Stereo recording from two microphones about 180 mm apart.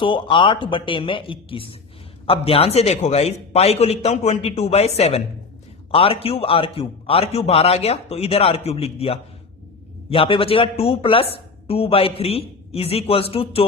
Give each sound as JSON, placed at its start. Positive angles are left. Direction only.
{"t": 0.0, "sound": "a woman's voice", "side_deg": 25}